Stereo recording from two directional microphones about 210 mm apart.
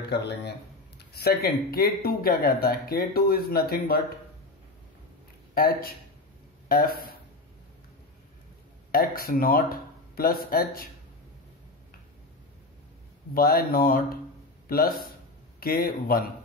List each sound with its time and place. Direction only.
0.9 s speech: 50° left (ahead or behind)
5.5 s speech: 45° left (ahead or behind)
8.9 s speech: 45° left (ahead or behind)
13.3 s speech: 45° left (ahead or behind)